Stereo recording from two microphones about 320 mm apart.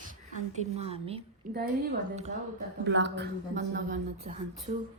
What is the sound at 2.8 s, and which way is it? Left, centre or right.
A woman's voice, right.